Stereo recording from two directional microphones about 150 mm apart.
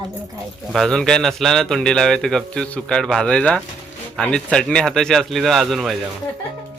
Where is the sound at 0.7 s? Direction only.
5° left (ahead or behind).